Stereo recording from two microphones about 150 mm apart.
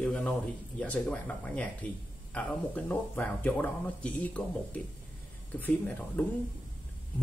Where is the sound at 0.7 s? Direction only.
10° left (ahead or behind).